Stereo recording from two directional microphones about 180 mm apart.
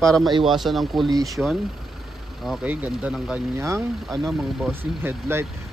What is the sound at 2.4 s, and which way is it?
Speech, 5° right (ahead or behind).